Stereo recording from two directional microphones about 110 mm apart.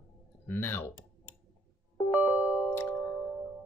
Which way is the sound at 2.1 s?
10° right (ahead or behind).